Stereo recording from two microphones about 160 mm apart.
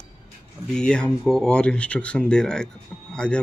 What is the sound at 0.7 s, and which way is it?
Speech, 5° left (ahead or behind).